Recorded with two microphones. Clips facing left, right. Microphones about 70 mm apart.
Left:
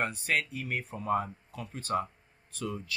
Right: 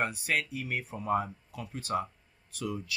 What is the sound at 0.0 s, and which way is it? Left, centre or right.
Speech, centre.